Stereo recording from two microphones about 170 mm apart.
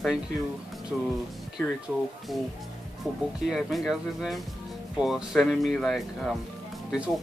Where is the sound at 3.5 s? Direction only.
Centre (ahead or behind).